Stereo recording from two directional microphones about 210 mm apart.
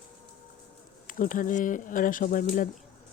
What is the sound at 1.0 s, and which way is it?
Speech, 40° left (ahead or behind).